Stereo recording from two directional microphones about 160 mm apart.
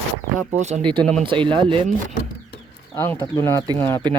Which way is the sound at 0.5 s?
45° right (ahead or behind).